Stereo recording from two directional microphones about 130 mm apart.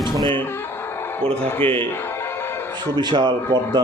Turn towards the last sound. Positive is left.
turn(degrees=-35)  # may be behind; listen again after turning